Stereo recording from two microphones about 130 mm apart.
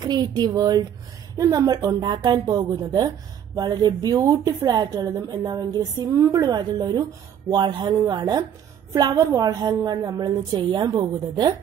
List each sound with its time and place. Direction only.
0.0 s a woman's voice: 30° right (ahead or behind)